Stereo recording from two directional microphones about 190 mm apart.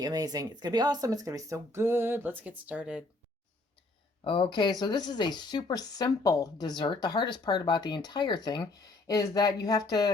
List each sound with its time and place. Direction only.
0.0 s speech: 20° right (ahead or behind)
4.2 s speech: 25° left (ahead or behind)